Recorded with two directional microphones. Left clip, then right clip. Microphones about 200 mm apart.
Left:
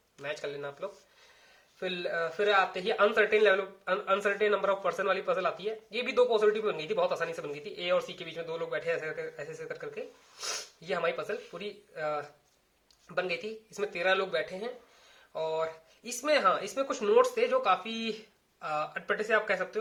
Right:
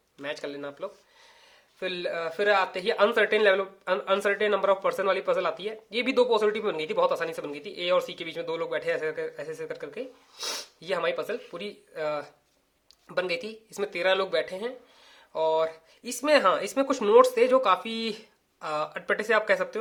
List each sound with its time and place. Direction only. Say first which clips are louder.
0.2 s speech: right 2 dB; 35° right (ahead or behind)